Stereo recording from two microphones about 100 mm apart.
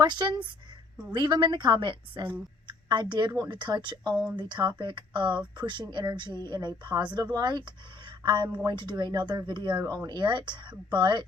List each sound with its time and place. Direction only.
0.0 s a woman's voice: 50° right (ahead or behind)